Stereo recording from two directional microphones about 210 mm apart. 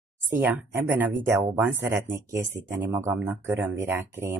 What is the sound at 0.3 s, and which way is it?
Speech, 10° right (ahead or behind).